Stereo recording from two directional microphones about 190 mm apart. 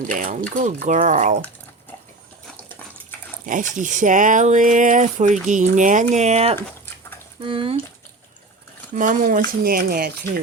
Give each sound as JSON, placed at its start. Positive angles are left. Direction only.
{"t": 0.0, "sound": "speech", "side_deg": -45}
{"t": 3.4, "sound": "speech", "side_deg": -45}
{"t": 9.0, "sound": "speech", "side_deg": -45}